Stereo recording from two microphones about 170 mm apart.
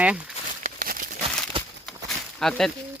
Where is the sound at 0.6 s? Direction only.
55° right (ahead or behind).